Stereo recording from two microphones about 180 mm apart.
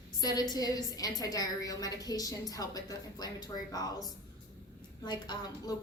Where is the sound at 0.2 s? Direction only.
20° left (ahead or behind).